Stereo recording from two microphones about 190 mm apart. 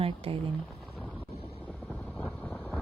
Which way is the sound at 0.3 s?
30° right (ahead or behind).